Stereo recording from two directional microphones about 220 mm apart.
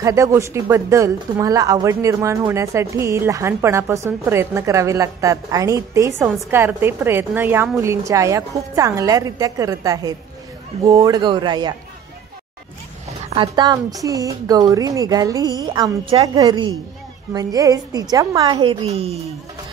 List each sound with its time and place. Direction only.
0.0 s speech: 15° right (ahead or behind)
13.3 s speech: 20° right (ahead or behind)